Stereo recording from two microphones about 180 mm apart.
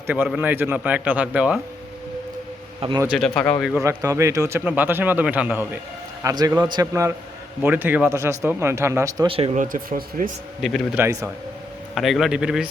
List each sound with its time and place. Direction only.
0.1 s speech: 10° right (ahead or behind)
3.1 s a man's voice: 5° left (ahead or behind)
3.8 s a man's voice: 15° right (ahead or behind)
9.3 s speech: 35° right (ahead or behind)
10.6 s a man's voice: 5° left (ahead or behind)
10.9 s speech: 15° right (ahead or behind)
11.9 s a man's voice: centre (ahead or behind)